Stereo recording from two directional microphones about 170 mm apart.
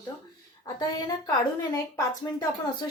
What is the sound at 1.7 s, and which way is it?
Speech, 20° left (ahead or behind).